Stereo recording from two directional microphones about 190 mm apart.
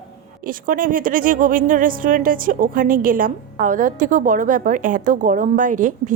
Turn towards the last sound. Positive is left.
turn(degrees=-45)  # may be behind; listen again after turning